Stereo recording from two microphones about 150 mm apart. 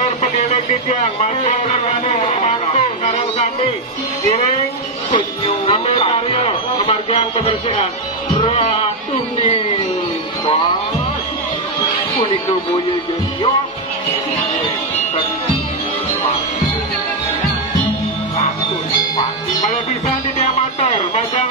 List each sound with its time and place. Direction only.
0.2 s a sound: 55° left (ahead or behind)
5.7 s music: 40° left (ahead or behind)
8.4 s speech: 40° left (ahead or behind)